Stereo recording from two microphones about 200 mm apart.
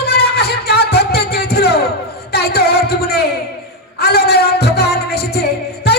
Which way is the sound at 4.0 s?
50° left (ahead or behind).